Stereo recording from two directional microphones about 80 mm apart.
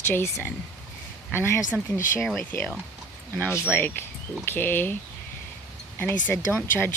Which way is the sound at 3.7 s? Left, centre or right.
Left.